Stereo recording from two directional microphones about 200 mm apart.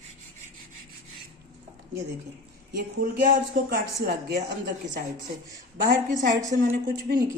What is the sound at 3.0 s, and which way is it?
Speech, 45° right (ahead or behind).